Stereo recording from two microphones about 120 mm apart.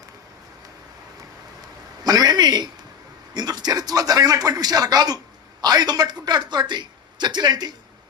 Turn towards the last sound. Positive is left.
turn(degrees=-35)  # may be behind; listen again after turning